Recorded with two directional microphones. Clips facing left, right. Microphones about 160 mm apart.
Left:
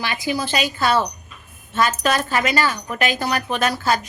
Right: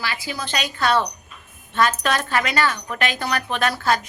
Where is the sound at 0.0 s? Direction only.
20° left (ahead or behind).